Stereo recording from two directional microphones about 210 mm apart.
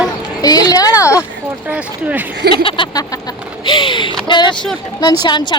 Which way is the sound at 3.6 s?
20° left (ahead or behind).